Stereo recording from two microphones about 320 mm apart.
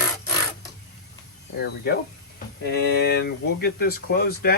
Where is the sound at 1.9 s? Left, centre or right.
Left.